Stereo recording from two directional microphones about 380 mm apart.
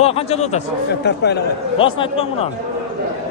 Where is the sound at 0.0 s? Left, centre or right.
Centre.